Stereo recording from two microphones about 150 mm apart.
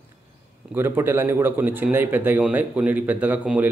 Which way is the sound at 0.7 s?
15° right (ahead or behind).